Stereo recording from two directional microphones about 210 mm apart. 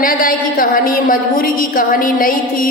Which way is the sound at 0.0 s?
40° left (ahead or behind).